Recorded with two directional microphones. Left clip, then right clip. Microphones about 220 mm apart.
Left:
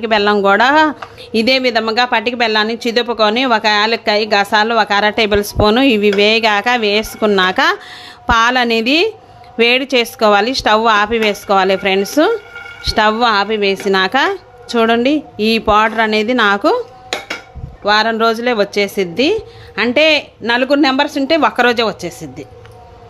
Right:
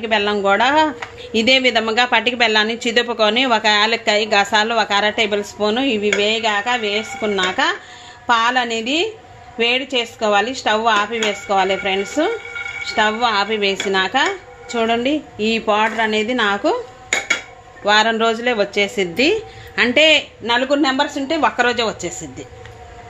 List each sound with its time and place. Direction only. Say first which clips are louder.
0.0 s speech: left 5 dB; 25° left (ahead or behind)
17.8 s speech: left 2 dB; 20° left (ahead or behind)